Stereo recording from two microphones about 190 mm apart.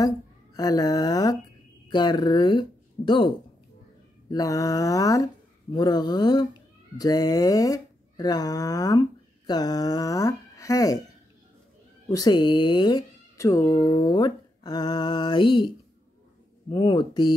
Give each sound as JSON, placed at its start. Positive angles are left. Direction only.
{"t": 0.6, "sound": "speech", "side_deg": 20}
{"t": 4.3, "sound": "speech", "side_deg": 20}
{"t": 12.1, "sound": "speech", "side_deg": 20}
{"t": 16.7, "sound": "speech", "side_deg": 25}